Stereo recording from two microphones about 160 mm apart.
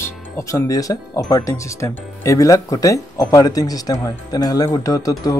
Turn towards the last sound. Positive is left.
turn(degrees=20)  # may be behind; listen again after turning